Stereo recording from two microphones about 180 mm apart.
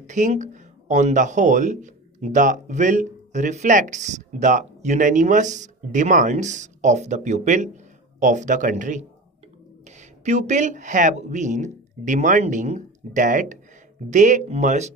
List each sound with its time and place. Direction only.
0.0 s speech: 40° right (ahead or behind)